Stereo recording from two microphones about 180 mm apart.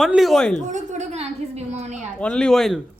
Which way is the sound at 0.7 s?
40° right (ahead or behind).